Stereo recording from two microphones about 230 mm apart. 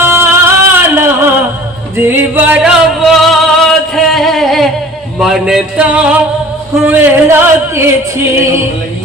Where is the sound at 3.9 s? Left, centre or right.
Centre.